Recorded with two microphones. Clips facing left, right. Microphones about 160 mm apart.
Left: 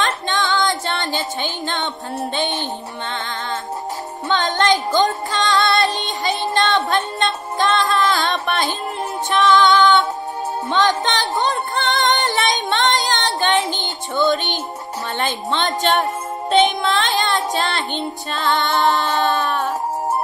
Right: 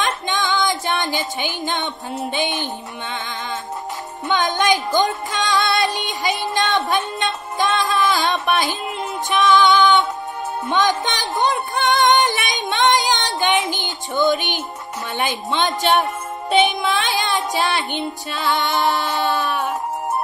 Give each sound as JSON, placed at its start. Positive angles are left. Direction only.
{"t": 0.0, "sound": "female singing", "side_deg": -15}
{"t": 4.3, "sound": "music", "side_deg": -15}